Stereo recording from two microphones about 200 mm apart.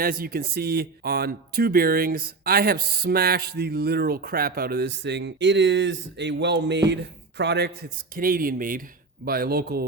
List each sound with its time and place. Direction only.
0.0 s speech: 45° right (ahead or behind)
7.8 s speech: 45° right (ahead or behind)